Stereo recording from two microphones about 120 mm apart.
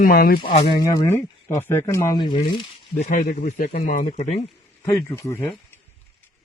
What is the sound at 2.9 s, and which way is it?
Speech, 80° left.